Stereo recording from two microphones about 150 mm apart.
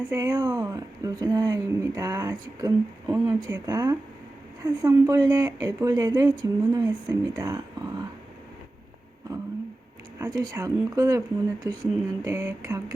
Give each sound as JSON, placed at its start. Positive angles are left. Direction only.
{"t": 0.1, "sound": "speech", "side_deg": -20}
{"t": 10.2, "sound": "speech", "side_deg": -25}